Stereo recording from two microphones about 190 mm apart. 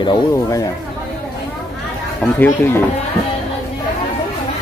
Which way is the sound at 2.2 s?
10° left (ahead or behind).